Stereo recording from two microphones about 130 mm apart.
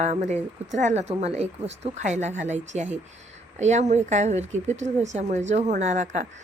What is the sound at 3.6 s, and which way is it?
Speech, 60° right (ahead or behind).